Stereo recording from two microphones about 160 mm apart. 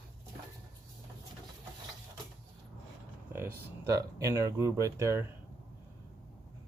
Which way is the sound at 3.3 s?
15° right (ahead or behind).